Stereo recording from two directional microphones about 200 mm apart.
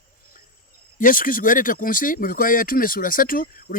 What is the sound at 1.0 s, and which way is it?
Speech, 45° left (ahead or behind).